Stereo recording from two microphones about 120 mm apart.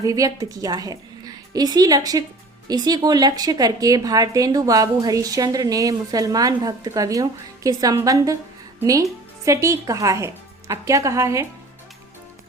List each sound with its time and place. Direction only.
0.0 s a woman's voice: 30° right (ahead or behind)